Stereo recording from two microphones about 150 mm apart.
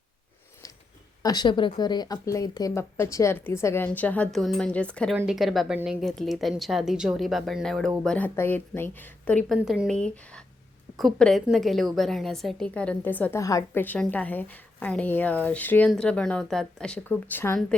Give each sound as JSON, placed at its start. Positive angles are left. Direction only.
{"t": 1.2, "sound": "a woman's voice", "side_deg": 25}
{"t": 5.1, "sound": "speech", "side_deg": -5}
{"t": 9.6, "sound": "speech", "side_deg": 0}
{"t": 13.4, "sound": "a woman's voice", "side_deg": 20}